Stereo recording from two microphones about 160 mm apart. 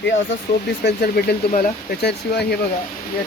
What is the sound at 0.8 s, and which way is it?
Speech, 90° left.